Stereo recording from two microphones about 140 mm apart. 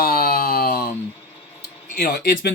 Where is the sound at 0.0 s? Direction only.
90° left.